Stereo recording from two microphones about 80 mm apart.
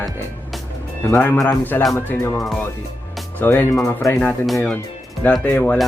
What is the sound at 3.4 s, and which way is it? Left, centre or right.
Speech, left.